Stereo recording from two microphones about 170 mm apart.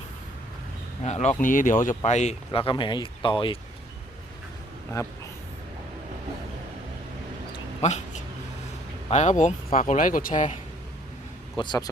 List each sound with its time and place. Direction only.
1.0 s speech: 40° left (ahead or behind)
2.5 s speech: 30° left (ahead or behind)
4.9 s a man's voice: 20° left (ahead or behind)
7.8 s speech: 40° left (ahead or behind)
9.0 s speech: 40° left (ahead or behind)
11.5 s speech: 25° left (ahead or behind)